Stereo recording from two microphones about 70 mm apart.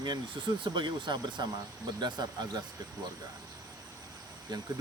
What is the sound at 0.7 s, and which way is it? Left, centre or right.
Speech, right.